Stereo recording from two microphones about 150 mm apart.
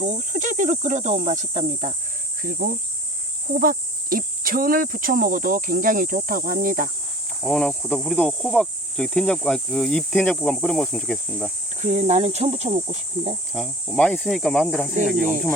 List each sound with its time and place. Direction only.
0.0 s cricket: 55° right (ahead or behind)
2.4 s speech: 65° right (ahead or behind)
7.4 s cricket: 5° left (ahead or behind)
11.8 s speech: 50° right (ahead or behind)
13.5 s cricket: centre (ahead or behind)